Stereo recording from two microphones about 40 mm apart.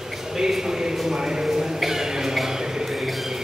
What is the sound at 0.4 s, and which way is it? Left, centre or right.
Speech, centre.